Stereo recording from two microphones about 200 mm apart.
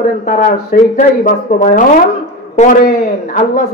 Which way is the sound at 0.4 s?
40° left (ahead or behind).